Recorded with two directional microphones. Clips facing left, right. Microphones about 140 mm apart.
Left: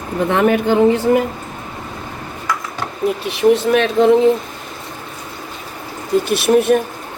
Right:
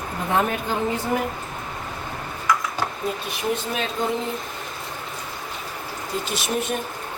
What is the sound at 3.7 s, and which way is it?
Speech, 80° left.